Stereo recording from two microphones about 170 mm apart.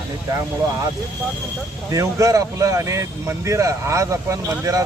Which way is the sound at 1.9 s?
20° right (ahead or behind).